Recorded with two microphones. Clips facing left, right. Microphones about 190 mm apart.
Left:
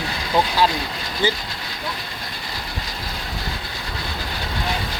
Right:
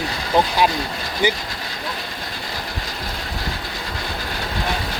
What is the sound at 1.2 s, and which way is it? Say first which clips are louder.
Speech: right 2 dB; 15° right (ahead or behind).